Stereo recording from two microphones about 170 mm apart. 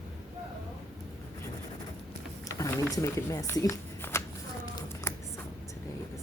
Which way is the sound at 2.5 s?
20° left (ahead or behind).